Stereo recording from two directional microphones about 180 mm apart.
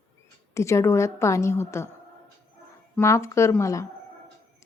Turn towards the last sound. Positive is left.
turn(degrees=15)  # may be behind; listen again after turning